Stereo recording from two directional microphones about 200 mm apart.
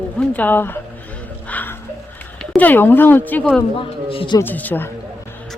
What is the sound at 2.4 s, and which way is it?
Speech, 10° left (ahead or behind).